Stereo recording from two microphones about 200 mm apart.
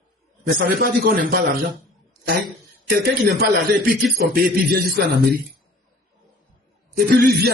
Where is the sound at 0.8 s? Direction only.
50° right (ahead or behind).